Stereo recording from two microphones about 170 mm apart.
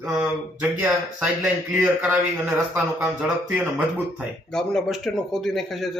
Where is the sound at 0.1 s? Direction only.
10° right (ahead or behind).